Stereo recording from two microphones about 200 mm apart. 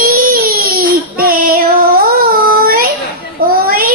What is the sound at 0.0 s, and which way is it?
Child singing, 45° right (ahead or behind).